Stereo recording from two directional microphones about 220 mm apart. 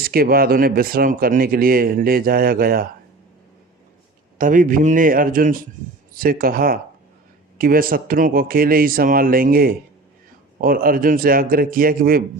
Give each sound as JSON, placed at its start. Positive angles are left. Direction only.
{"t": 0.0, "sound": "speech", "side_deg": -45}
{"t": 4.4, "sound": "speech", "side_deg": -35}